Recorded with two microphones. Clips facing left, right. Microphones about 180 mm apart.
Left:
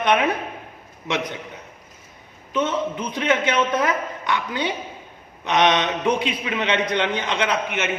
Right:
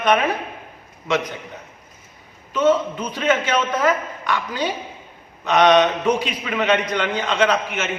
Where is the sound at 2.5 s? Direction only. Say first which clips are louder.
Right 5 dB; 20° left (ahead or behind).